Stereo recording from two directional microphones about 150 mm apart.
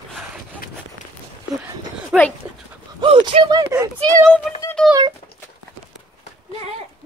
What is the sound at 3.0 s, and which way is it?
Speech, 35° right (ahead or behind).